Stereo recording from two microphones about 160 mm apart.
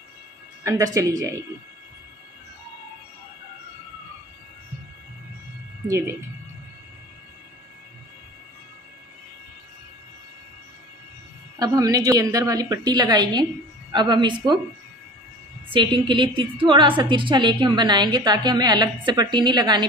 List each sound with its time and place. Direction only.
0.7 s a woman's voice: 20° right (ahead or behind)
11.5 s a woman's voice: 25° right (ahead or behind)
15.7 s a woman's voice: 30° right (ahead or behind)